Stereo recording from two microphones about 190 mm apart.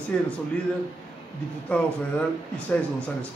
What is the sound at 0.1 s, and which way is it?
Speech, 5° left (ahead or behind).